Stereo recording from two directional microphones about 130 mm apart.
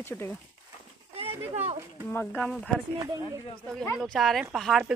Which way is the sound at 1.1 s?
50° right (ahead or behind).